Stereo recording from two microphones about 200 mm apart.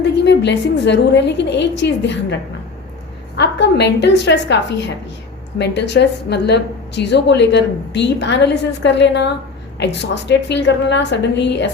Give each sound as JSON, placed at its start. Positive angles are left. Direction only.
{"t": 0.0, "sound": "a woman's voice", "side_deg": 60}
{"t": 3.3, "sound": "a woman's voice", "side_deg": 60}